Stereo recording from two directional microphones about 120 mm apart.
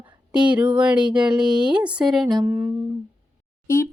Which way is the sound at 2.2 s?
35° right (ahead or behind).